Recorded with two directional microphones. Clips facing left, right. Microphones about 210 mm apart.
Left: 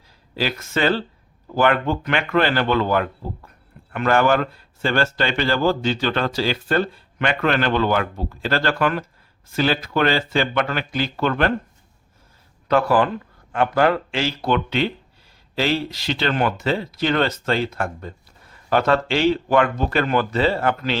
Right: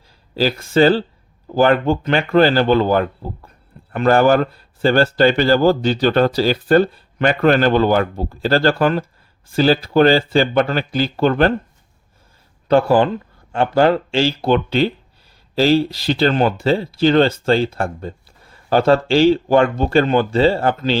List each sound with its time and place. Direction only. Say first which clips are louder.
0.3 s speech: right 8 dB; 30° right (ahead or behind)
12.6 s speech: right 4 dB; 30° right (ahead or behind)